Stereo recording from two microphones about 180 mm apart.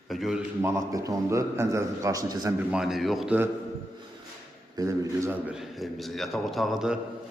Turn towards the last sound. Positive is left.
turn(degrees=-5)  # may be behind; listen again after turning